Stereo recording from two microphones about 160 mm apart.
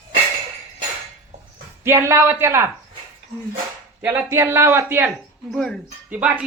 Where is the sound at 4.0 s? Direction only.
15° right (ahead or behind).